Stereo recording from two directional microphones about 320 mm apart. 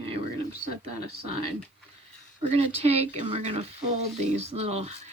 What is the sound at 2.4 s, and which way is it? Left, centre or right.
Speech, centre.